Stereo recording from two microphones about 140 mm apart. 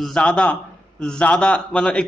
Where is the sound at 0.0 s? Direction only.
5° left (ahead or behind).